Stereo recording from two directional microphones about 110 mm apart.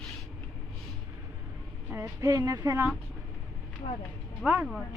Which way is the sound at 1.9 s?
25° right (ahead or behind).